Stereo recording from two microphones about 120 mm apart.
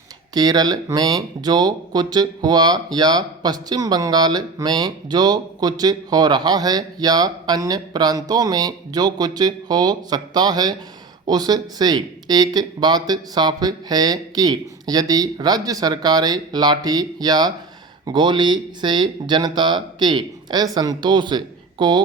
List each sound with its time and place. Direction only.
0.3 s speech: 35° right (ahead or behind)